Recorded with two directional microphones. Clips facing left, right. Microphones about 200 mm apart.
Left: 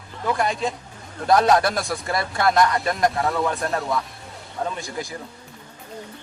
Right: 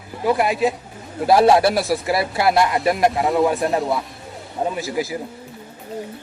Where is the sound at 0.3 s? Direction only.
5° right (ahead or behind).